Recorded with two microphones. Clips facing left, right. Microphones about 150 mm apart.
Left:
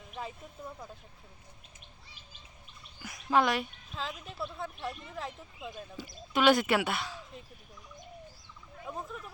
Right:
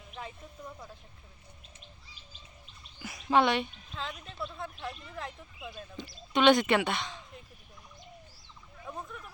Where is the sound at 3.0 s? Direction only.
Centre (ahead or behind).